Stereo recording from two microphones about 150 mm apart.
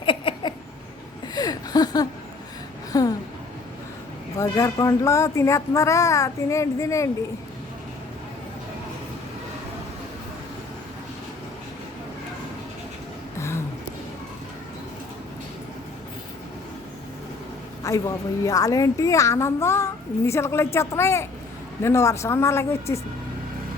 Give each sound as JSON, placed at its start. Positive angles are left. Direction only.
{"t": 0.0, "sound": "a sound", "side_deg": 35}
{"t": 4.4, "sound": "a woman's voice", "side_deg": 20}
{"t": 17.8, "sound": "a woman's voice", "side_deg": 20}